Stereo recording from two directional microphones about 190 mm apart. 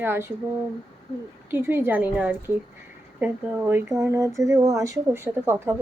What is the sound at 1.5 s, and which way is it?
Speech, 10° right (ahead or behind).